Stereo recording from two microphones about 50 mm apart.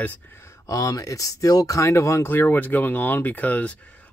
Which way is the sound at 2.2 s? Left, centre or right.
Left.